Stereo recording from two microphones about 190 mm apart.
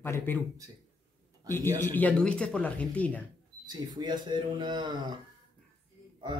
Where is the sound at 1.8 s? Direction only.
10° left (ahead or behind).